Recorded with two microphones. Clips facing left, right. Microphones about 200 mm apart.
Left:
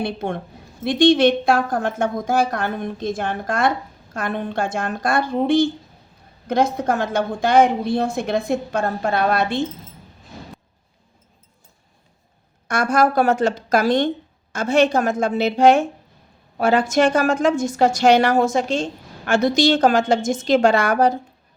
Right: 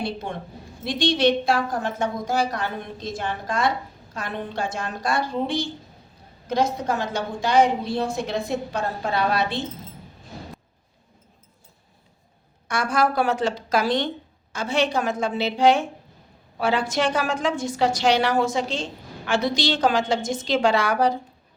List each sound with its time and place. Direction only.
0.0 s a woman's voice: 55° left (ahead or behind)
12.6 s a woman's voice: 45° left (ahead or behind)